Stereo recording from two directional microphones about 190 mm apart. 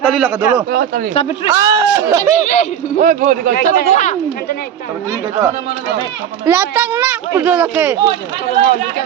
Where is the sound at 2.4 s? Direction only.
40° left (ahead or behind).